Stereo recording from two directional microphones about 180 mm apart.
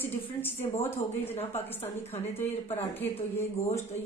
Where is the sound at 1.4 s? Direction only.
35° left (ahead or behind).